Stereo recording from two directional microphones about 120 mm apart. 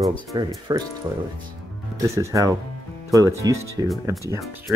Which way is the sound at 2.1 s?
25° right (ahead or behind).